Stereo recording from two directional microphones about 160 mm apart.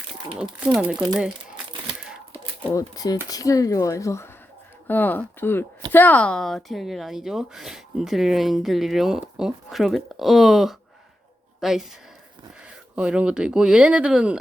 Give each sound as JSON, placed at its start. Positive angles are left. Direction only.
{"t": 0.6, "sound": "speech", "side_deg": -10}
{"t": 2.7, "sound": "speech", "side_deg": 25}